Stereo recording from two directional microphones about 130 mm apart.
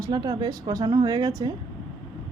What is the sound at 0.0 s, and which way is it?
Speech, 30° right (ahead or behind).